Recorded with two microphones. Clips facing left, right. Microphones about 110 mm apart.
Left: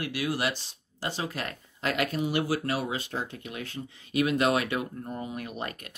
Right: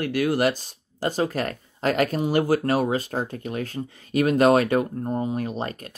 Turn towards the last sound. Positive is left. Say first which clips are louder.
# right 7 dB
turn(degrees=-30)  # may be behind; listen again after turning